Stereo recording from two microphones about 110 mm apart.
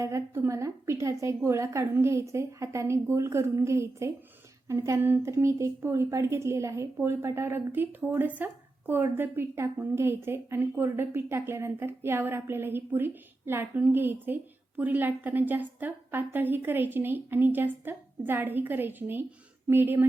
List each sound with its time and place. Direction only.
0.0 s a woman's voice: 25° right (ahead or behind)